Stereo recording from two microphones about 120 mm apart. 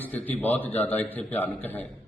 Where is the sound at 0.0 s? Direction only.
15° left (ahead or behind).